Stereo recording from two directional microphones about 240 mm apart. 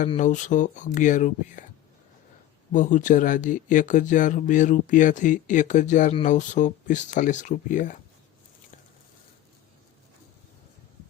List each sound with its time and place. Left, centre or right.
0.0 s speech: left
2.7 s speech: left